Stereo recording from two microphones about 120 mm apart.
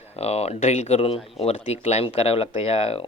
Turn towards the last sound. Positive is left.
turn(degrees=55)  # may be behind; listen again after turning